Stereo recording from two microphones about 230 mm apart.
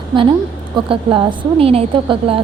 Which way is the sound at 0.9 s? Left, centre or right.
Right.